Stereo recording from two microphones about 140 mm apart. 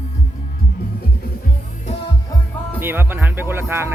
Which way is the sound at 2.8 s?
15° right (ahead or behind).